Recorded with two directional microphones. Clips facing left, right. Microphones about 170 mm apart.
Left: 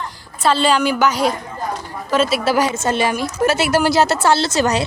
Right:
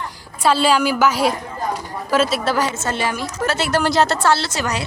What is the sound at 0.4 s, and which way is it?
A woman's voice, 10° right (ahead or behind).